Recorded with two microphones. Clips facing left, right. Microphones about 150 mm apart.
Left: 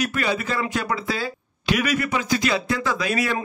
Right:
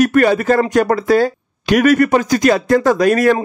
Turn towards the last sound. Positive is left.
turn(degrees=-50)  # may be behind; listen again after turning